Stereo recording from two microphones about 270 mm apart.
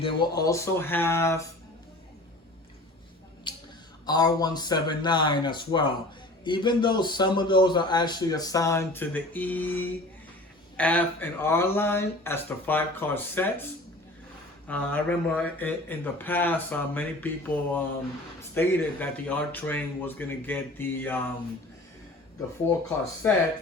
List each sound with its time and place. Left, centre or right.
0.0 s speech: centre
3.5 s a sound: centre
4.0 s speech: centre
14.7 s speech: centre
18.5 s speech: centre
23.2 s speech: centre